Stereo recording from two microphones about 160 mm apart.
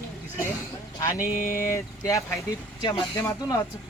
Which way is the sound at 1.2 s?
60° left (ahead or behind).